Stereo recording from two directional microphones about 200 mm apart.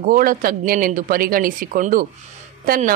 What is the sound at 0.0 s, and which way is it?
Speech, 45° right (ahead or behind).